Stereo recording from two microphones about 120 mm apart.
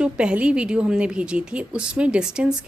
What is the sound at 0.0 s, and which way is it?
A woman's voice, 10° right (ahead or behind).